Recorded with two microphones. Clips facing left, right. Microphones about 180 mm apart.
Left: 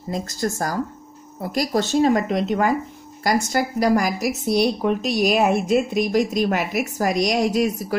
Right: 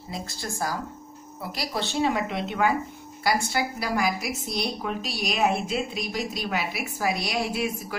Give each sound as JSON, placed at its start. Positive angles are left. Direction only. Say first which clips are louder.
{"t": 0.1, "sound": "a woman's voice", "louder": "left 10 dB", "side_deg": 45}